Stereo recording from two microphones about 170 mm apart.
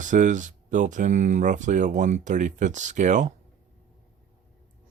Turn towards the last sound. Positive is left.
turn(degrees=-45)  # may be behind; listen again after turning